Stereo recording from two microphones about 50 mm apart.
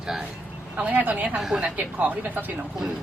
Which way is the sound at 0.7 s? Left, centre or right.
Right.